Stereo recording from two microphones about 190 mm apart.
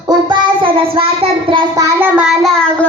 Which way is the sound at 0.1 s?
25° right (ahead or behind).